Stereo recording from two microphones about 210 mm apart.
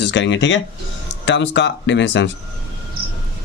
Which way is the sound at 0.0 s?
55° left (ahead or behind).